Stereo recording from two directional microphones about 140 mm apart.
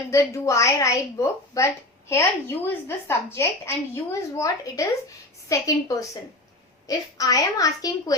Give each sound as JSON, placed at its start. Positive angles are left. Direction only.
{"t": 0.1, "sound": "a woman's voice", "side_deg": 20}